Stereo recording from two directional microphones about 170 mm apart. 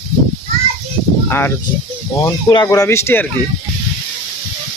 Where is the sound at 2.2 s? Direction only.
20° left (ahead or behind).